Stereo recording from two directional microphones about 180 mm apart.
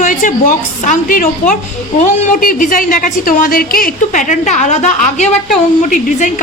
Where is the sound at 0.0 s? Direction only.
45° left (ahead or behind).